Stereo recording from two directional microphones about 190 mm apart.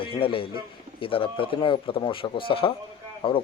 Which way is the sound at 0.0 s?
30° left (ahead or behind).